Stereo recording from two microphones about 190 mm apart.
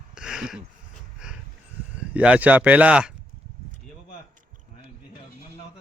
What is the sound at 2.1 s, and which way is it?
Speech, 5° right (ahead or behind).